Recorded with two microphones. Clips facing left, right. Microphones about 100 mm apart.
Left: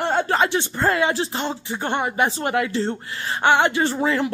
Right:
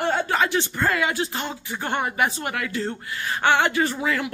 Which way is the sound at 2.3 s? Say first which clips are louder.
Left 6 dB; 30° left (ahead or behind).